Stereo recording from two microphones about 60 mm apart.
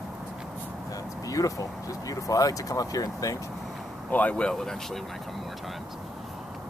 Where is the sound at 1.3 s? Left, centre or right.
Left.